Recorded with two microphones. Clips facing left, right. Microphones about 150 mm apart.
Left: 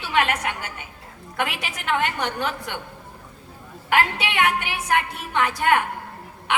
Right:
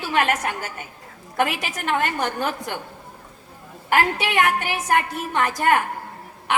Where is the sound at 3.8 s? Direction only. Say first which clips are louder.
Right 1 dB; 40° right (ahead or behind).